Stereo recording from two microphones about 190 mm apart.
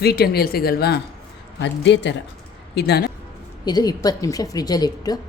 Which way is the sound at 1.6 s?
65° left (ahead or behind).